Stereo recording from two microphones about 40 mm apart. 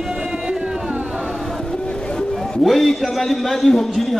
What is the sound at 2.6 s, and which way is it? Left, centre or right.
A man's voice, centre.